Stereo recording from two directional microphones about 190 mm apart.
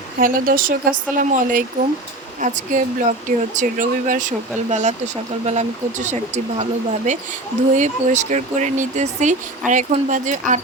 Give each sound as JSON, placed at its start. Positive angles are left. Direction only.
{"t": 0.2, "sound": "speech", "side_deg": -45}